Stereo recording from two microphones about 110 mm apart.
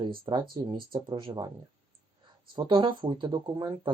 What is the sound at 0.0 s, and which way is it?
Speech, 50° right (ahead or behind).